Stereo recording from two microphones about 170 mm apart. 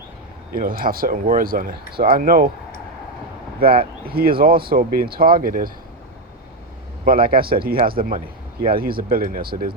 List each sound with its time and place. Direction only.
0.5 s speech: 55° right (ahead or behind)
4.0 s speech: 60° right (ahead or behind)
7.0 s speech: 60° right (ahead or behind)